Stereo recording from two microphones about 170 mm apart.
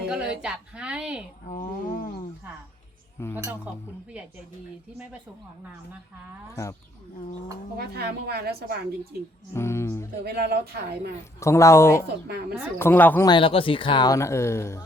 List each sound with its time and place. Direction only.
0.1 s a woman's voice: 5° right (ahead or behind)
1.5 s a sound: 50° left (ahead or behind)
3.3 s speech: 10° right (ahead or behind)
7.8 s a woman's voice: 70° right (ahead or behind)
9.5 s speech: 15° left (ahead or behind)
10.2 s a woman's voice: 70° right (ahead or behind)
11.3 s speech: 15° left (ahead or behind)
12.3 s a woman's voice: 70° right (ahead or behind)
12.8 s speech: 10° left (ahead or behind)
13.2 s speech: 30° left (ahead or behind)